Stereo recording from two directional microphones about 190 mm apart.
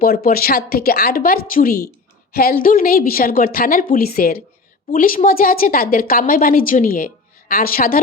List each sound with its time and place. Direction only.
0.0 s a woman's voice: 55° left (ahead or behind)